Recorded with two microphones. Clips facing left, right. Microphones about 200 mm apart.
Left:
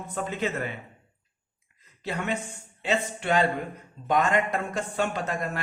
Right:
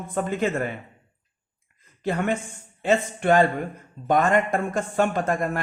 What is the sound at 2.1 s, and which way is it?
A man's voice, 50° right (ahead or behind).